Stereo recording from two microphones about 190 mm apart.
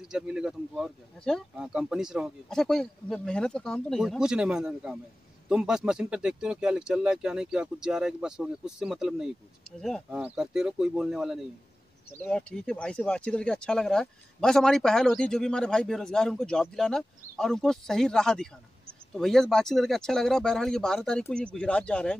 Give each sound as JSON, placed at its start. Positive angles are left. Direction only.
{"t": 0.1, "sound": "speech", "side_deg": -5}